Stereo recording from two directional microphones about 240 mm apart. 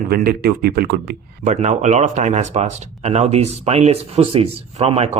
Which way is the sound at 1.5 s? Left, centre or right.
Right.